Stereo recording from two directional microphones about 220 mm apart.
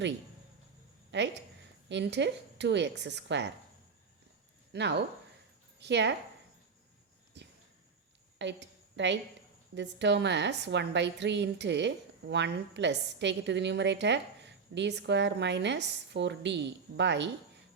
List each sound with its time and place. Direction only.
1.1 s a woman's voice: 55° right (ahead or behind)
4.7 s a woman's voice: 50° right (ahead or behind)
7.3 s a sound: 50° right (ahead or behind)
9.7 s a woman's voice: 55° right (ahead or behind)